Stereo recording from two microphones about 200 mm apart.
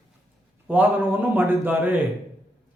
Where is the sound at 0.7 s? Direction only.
10° right (ahead or behind).